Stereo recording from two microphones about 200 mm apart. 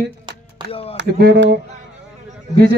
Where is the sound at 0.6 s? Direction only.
30° left (ahead or behind).